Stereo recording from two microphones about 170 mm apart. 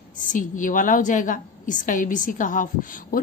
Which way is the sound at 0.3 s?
50° left (ahead or behind).